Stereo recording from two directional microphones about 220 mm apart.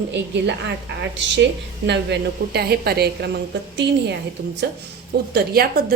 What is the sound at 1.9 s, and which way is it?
Speech, 50° right (ahead or behind).